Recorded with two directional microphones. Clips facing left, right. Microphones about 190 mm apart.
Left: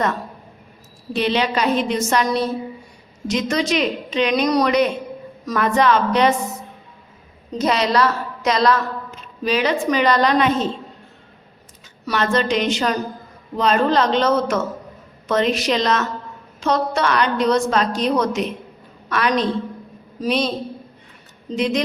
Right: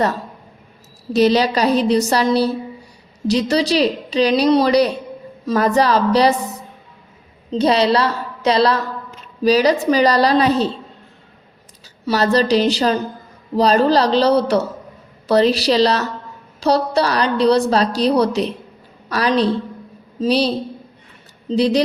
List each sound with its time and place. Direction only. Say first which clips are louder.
1.1 s a woman's voice: right 5 dB; 40° right (ahead or behind)
12.0 s a woman's voice: right 4 dB; 35° right (ahead or behind)
21.5 s a woman's voice: right 5 dB; 35° right (ahead or behind)